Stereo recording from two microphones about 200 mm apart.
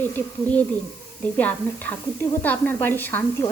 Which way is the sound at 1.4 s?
10° left (ahead or behind).